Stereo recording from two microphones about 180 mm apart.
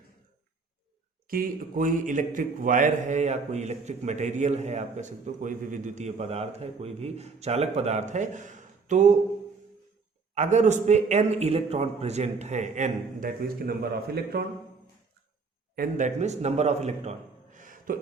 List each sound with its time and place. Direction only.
1.3 s a man's voice: 50° right (ahead or behind)
10.3 s a man's voice: 40° right (ahead or behind); by 14.4 s 60° right (ahead or behind)
15.7 s a man's voice: 50° right (ahead or behind)